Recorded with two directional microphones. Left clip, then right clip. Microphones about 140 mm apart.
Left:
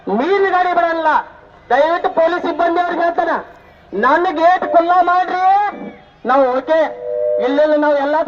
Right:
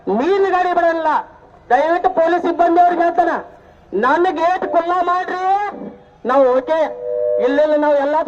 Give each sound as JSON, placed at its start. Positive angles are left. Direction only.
{"t": 0.0, "sound": "a man's voice", "side_deg": -40}